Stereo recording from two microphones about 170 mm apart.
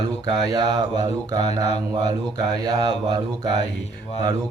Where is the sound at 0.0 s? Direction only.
25° right (ahead or behind).